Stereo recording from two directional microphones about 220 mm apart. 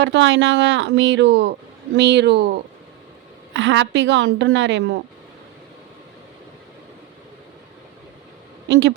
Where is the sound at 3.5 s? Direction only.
55° right (ahead or behind).